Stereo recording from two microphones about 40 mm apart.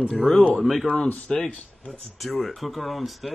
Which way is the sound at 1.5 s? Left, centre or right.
Left.